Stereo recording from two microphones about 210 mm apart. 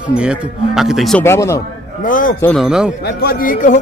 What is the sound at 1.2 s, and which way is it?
Speech, 10° left (ahead or behind).